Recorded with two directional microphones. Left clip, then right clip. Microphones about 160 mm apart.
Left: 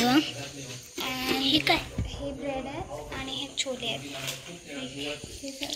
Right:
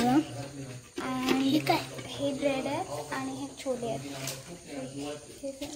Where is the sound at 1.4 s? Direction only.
10° right (ahead or behind).